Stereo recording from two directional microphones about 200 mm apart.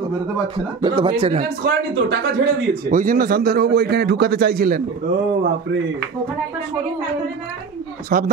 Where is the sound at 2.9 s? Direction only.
45° right (ahead or behind).